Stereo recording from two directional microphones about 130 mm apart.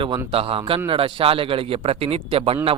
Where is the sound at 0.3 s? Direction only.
45° right (ahead or behind).